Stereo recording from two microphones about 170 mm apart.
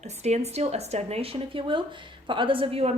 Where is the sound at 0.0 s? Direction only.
40° right (ahead or behind).